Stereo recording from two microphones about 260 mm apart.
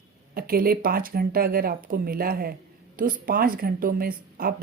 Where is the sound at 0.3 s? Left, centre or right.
Right.